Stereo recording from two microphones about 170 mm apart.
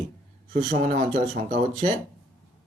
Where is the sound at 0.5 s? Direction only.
45° right (ahead or behind).